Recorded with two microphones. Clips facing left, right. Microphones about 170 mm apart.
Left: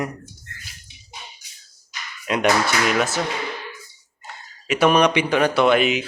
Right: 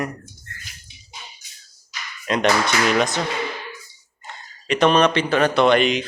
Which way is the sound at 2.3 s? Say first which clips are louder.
Even; 10° left (ahead or behind).